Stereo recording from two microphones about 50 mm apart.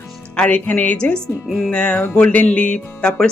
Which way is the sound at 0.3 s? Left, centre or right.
Left.